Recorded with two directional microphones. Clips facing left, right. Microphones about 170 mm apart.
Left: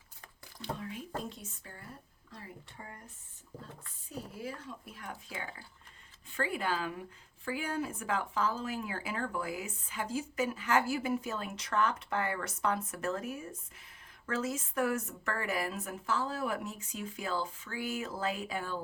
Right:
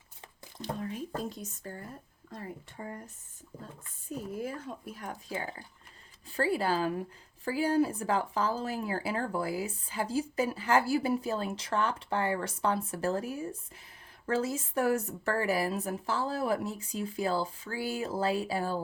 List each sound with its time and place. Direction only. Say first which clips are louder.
0.6 s speech: right 4 dB; 40° right (ahead or behind)
4.4 s speech: right 5 dB; 50° right (ahead or behind)